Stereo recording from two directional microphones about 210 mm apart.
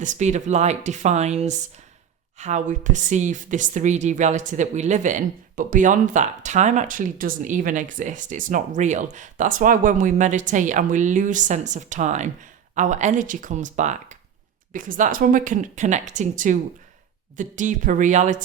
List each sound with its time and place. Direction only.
0.0 s speech: 35° right (ahead or behind)